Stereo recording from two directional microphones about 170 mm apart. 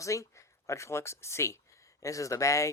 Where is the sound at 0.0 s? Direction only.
20° left (ahead or behind).